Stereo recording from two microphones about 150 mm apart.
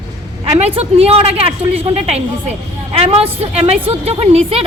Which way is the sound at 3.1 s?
40° right (ahead or behind).